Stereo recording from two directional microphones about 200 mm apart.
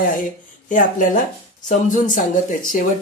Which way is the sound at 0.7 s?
40° left (ahead or behind).